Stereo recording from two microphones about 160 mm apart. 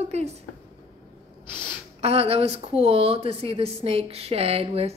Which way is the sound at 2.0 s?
40° right (ahead or behind).